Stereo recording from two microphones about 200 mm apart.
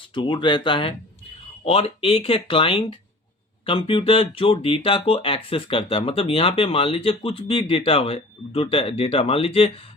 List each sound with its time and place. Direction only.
0.1 s speech: 25° left (ahead or behind)